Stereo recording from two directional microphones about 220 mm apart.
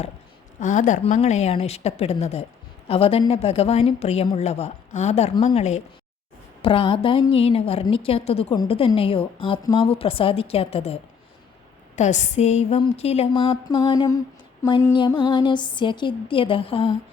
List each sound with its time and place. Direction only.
0.6 s a woman's voice: 35° left (ahead or behind)